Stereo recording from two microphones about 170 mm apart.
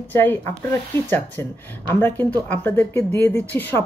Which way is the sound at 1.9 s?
10° left (ahead or behind).